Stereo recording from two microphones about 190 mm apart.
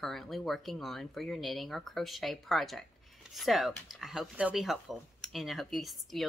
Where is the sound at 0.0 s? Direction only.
Centre (ahead or behind).